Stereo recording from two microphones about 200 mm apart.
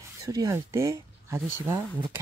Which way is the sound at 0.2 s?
15° right (ahead or behind).